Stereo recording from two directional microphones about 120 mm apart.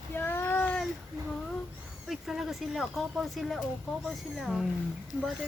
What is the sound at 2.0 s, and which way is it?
Speech, centre (ahead or behind).